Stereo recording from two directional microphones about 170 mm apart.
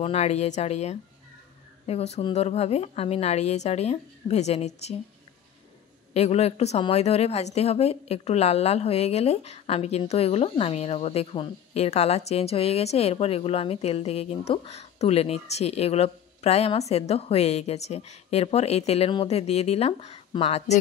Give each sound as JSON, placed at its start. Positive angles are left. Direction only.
{"t": 0.0, "sound": "a woman's voice", "side_deg": 40}
{"t": 6.1, "sound": "a woman's voice", "side_deg": 40}